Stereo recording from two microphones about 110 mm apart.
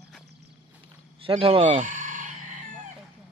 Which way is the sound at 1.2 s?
60° right (ahead or behind).